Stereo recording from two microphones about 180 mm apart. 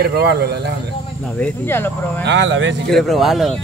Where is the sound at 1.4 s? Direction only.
10° left (ahead or behind).